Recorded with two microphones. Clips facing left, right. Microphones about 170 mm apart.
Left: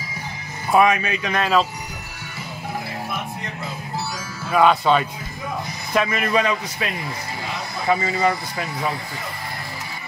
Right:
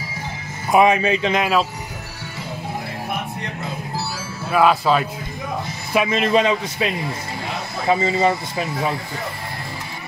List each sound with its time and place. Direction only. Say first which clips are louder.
0.7 s speech: right 2 dB; 25° right (ahead or behind)
1.4 s speech: even; 5° right (ahead or behind)
4.5 s speech: even; 5° right (ahead or behind)
6.0 s speech: right 3 dB; 25° right (ahead or behind)
7.9 s speech: right 2 dB; 25° right (ahead or behind)